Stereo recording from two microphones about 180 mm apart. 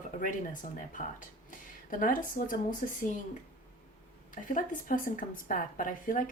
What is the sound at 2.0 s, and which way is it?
Speech, 50° left (ahead or behind).